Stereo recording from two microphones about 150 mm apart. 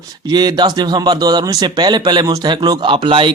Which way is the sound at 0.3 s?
25° right (ahead or behind).